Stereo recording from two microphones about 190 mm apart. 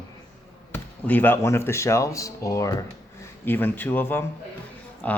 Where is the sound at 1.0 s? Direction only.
10° left (ahead or behind).